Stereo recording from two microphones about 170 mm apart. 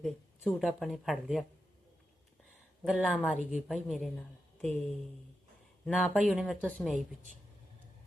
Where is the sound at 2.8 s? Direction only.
5° right (ahead or behind).